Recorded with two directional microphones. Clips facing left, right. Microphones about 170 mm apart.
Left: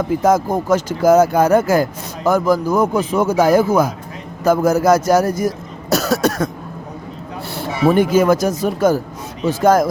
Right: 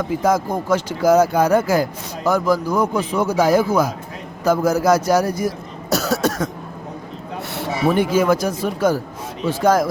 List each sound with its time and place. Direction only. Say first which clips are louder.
0.2 s speech: left 3 dB; 45° left (ahead or behind)
5.9 s cough: left 3 dB; 65° left (ahead or behind)
7.5 s speech: left 4 dB; 45° left (ahead or behind)